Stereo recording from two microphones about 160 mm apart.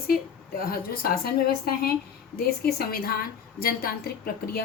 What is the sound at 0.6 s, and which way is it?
A woman's voice, 70° left (ahead or behind).